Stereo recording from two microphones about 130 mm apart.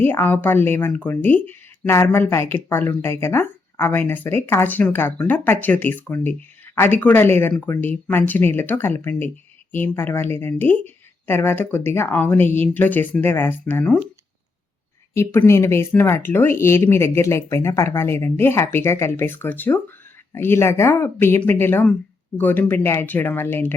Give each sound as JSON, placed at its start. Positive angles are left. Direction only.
{"t": 0.0, "sound": "speech", "side_deg": 15}
{"t": 15.1, "sound": "speech", "side_deg": 20}